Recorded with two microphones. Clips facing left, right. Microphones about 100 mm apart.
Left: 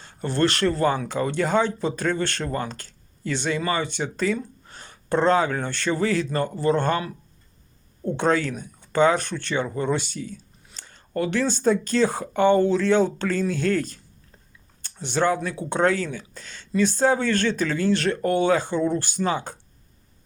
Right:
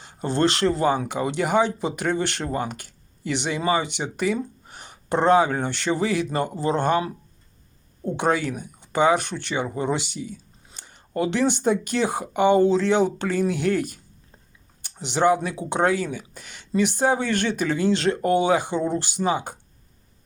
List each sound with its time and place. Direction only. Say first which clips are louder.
0.0 s speech: right 1 dB; 20° right (ahead or behind)